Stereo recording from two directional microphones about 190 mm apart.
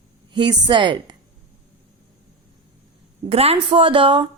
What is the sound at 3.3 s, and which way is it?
A woman's voice, 30° right (ahead or behind).